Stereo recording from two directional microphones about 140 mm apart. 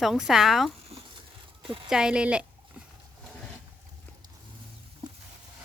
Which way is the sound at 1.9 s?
5° right (ahead or behind).